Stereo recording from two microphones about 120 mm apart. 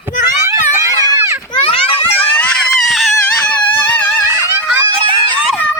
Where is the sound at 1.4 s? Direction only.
45° left (ahead or behind).